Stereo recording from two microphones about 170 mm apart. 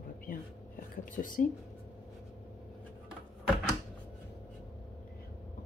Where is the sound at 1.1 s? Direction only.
55° left (ahead or behind).